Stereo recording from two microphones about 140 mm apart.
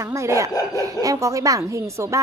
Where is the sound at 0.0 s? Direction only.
20° right (ahead or behind).